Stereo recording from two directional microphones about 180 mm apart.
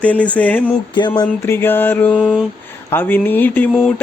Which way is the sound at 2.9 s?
10° left (ahead or behind).